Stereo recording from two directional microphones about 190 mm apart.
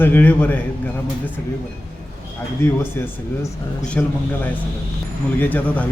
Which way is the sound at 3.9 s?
10° left (ahead or behind).